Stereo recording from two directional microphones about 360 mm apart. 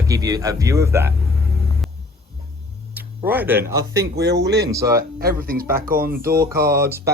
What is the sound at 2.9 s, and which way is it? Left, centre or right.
Speech, centre.